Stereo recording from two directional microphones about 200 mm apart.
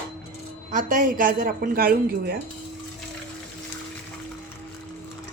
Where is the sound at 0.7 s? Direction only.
40° right (ahead or behind).